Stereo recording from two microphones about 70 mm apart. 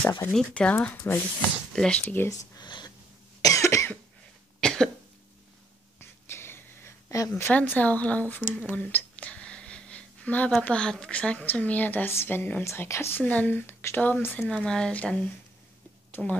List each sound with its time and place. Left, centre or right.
0.6 s a woman's voice: centre
2.5 s a sound: left
3.4 s cough: left
4.6 s cough: centre
5.9 s a sound: left
7.1 s a woman's voice: left
7.3 s a woman's voice: left
12.6 s speech: left
13.2 s a woman's voice: left
14.5 s speech: centre
16.2 s speech: centre